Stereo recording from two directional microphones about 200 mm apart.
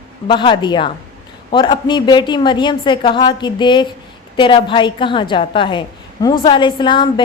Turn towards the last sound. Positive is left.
turn(degrees=25)  # may be behind; listen again after turning